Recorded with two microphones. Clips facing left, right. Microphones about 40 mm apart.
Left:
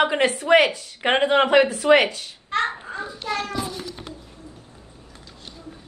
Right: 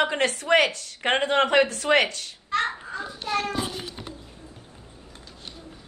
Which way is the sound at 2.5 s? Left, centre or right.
Left.